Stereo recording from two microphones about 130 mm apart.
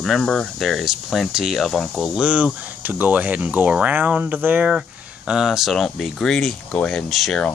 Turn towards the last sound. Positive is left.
turn(degrees=0)  # may be behind; listen again after turning